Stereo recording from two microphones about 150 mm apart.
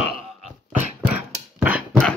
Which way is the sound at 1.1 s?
10° right (ahead or behind).